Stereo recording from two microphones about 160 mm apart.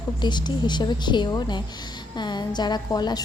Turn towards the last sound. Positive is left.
turn(degrees=25)  # may be behind; listen again after turning